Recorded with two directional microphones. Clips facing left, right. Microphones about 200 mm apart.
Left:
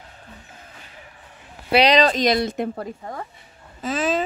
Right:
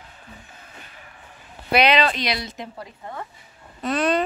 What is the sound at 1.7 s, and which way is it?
Speech, 35° left (ahead or behind).